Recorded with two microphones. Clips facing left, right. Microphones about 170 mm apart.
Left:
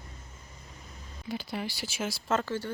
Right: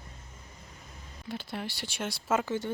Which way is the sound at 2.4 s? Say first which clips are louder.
Right 1 dB; 20° right (ahead or behind).